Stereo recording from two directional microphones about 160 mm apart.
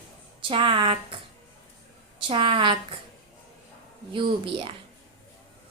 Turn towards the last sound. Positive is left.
turn(degrees=-30)  # may be behind; listen again after turning